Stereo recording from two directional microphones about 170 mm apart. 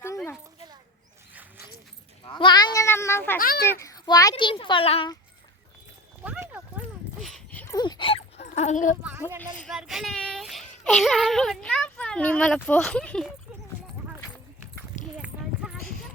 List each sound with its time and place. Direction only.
2.2 s speech: 25° left (ahead or behind)
3.3 s a child's voice: 60° left (ahead or behind)
3.6 s a child's voice: 15° left (ahead or behind); by 5.1 s 35° left (ahead or behind)
6.2 s a sound: 10° right (ahead or behind); by 7.8 s 10° left (ahead or behind)
7.8 s dog: 25° left (ahead or behind)
8.4 s speech: 45° left (ahead or behind)
9.6 s a child's voice: centre (ahead or behind)